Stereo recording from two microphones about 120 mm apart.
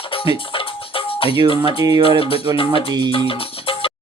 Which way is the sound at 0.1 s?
50° left (ahead or behind).